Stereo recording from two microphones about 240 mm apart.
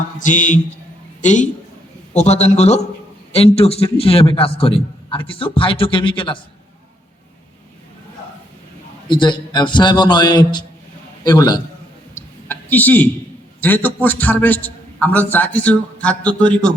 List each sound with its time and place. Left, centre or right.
0.2 s a man's voice: left
9.0 s a man's voice: centre
12.1 s a sound: centre
13.6 s a man's voice: centre